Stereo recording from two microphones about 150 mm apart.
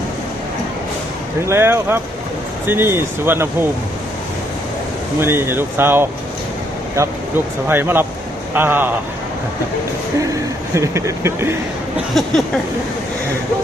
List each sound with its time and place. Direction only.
1.5 s speech: 15° right (ahead or behind)
5.2 s speech: 15° right (ahead or behind)
7.7 s speech: 15° right (ahead or behind)
10.2 s speech: 20° right (ahead or behind)
12.1 s a sound: centre (ahead or behind)